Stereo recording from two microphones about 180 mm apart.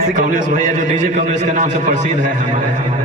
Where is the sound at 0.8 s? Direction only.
45° right (ahead or behind).